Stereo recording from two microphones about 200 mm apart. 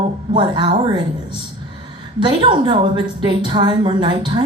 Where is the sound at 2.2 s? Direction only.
20° right (ahead or behind).